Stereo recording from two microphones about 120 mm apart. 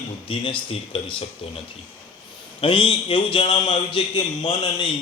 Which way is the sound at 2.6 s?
45° left (ahead or behind).